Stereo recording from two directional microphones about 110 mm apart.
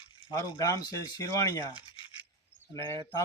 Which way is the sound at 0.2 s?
45° left (ahead or behind).